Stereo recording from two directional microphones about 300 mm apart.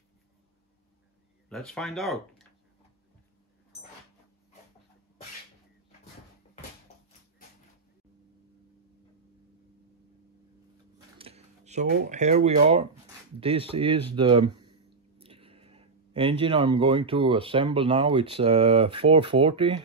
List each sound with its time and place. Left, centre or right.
1.5 s speech: centre
11.1 s speech: centre